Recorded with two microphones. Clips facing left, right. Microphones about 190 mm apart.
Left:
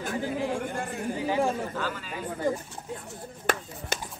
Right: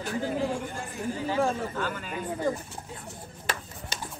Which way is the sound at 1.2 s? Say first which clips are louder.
Left 1 dB; 15° left (ahead or behind).